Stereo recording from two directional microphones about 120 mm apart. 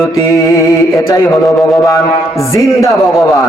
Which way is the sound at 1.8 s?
25° left (ahead or behind).